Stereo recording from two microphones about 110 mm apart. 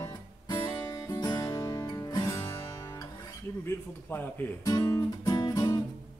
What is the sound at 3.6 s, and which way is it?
Speech, 15° left (ahead or behind).